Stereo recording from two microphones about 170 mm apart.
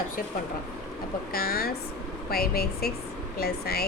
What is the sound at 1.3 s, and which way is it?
Speech, 65° left (ahead or behind).